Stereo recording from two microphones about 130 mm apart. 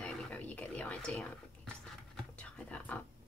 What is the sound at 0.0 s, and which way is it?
Whispering, 10° left (ahead or behind).